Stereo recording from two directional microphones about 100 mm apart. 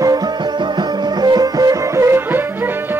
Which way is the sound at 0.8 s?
45° right (ahead or behind).